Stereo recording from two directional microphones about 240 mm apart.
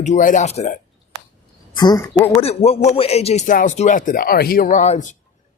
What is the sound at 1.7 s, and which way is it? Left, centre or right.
Speech, centre.